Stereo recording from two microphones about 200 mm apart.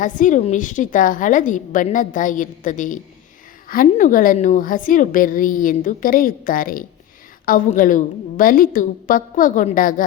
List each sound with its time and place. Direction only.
0.0 s a woman's voice: 40° left (ahead or behind)